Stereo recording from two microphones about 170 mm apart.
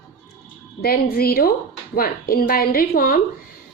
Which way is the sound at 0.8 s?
60° left (ahead or behind).